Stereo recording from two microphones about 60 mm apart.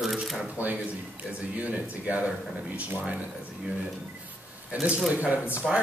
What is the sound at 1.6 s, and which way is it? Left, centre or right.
Speech, right.